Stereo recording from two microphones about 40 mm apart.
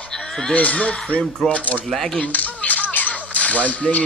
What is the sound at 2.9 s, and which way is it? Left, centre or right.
Whip, left.